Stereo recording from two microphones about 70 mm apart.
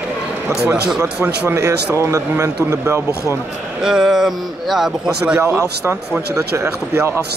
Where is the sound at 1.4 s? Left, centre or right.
Right.